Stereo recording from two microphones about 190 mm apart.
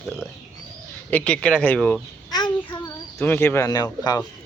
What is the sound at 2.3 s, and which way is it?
A child's voice, 20° left (ahead or behind).